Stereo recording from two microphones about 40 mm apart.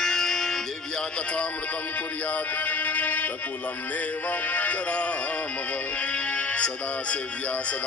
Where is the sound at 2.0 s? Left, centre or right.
Left.